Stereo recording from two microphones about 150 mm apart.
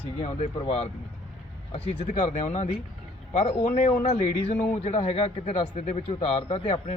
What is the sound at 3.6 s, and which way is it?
Speech, 60° left (ahead or behind).